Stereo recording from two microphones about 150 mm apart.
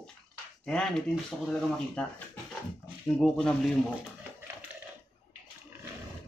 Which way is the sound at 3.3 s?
5° left (ahead or behind).